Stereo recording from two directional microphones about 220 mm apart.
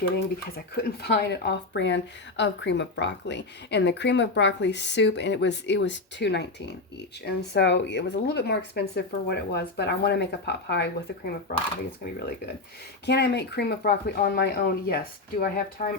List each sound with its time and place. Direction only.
0.8 s a woman's voice: 45° left (ahead or behind)
13.1 s a woman's voice: 50° left (ahead or behind)